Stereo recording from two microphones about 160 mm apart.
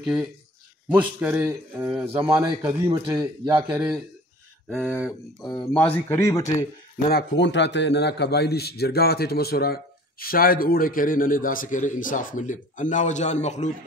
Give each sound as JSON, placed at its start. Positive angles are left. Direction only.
{"t": 0.0, "sound": "speech", "side_deg": -5}
{"t": 3.2, "sound": "speech", "side_deg": -25}
{"t": 4.6, "sound": "speech", "side_deg": -5}
{"t": 5.7, "sound": "speech", "side_deg": 10}
{"t": 7.1, "sound": "a man's voice", "side_deg": 85}